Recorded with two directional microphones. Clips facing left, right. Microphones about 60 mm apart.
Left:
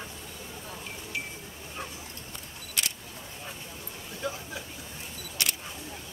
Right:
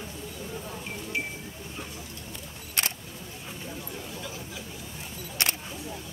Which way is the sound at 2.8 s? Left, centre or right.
Right.